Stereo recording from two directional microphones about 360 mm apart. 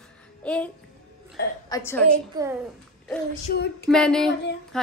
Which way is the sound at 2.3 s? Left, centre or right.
Centre.